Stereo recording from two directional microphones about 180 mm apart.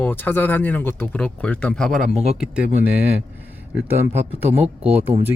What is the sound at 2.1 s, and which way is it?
Speech, 35° right (ahead or behind).